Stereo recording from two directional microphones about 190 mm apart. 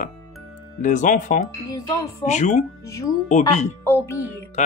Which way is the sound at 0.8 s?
40° left (ahead or behind).